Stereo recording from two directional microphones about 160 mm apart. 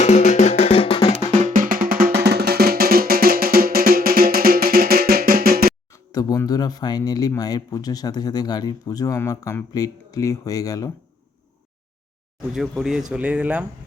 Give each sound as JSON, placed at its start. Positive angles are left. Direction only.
{"t": 0.0, "sound": "music", "side_deg": 45}
{"t": 1.3, "sound": "music", "side_deg": -55}
{"t": 5.9, "sound": "speech", "side_deg": 20}
{"t": 12.5, "sound": "speech", "side_deg": -5}